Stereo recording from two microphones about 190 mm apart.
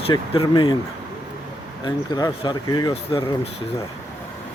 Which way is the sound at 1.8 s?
20° left (ahead or behind).